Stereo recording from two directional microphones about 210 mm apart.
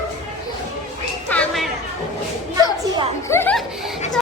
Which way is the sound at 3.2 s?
10° left (ahead or behind).